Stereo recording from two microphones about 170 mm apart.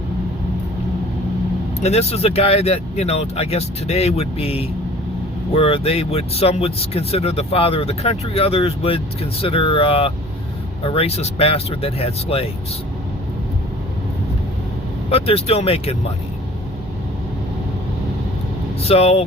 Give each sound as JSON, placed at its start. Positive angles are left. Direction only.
{"t": 1.8, "sound": "speech", "side_deg": 40}
{"t": 15.1, "sound": "speech", "side_deg": 35}
{"t": 18.8, "sound": "speech", "side_deg": 35}